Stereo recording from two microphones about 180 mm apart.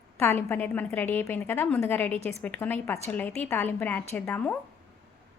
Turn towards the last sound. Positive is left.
turn(degrees=10)  # may be behind; listen again after turning